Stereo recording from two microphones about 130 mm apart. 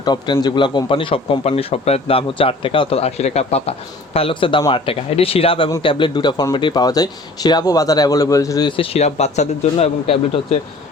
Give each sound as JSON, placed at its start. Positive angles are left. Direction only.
{"t": 0.0, "sound": "a man's voice", "side_deg": 35}
{"t": 8.7, "sound": "a man's voice", "side_deg": 45}